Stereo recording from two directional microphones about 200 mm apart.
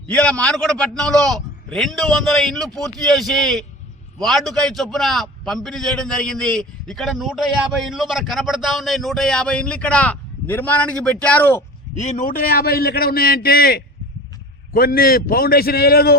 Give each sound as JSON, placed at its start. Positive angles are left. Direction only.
{"t": 0.1, "sound": "a man's voice", "side_deg": 5}
{"t": 11.9, "sound": "a man's voice", "side_deg": 40}